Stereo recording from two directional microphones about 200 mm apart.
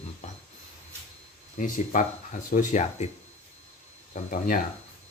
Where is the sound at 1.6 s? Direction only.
40° left (ahead or behind).